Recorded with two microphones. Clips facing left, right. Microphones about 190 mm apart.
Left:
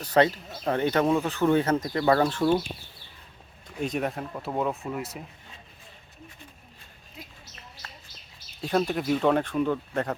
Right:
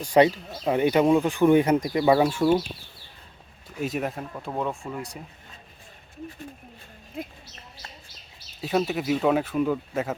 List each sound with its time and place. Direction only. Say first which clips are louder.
0.0 s speech: right 3 dB; 15° right (ahead or behind)
3.8 s speech: even; 5° right (ahead or behind)
7.2 s speech: right 12 dB; 55° right (ahead or behind)
8.6 s speech: right 1 dB; 5° right (ahead or behind)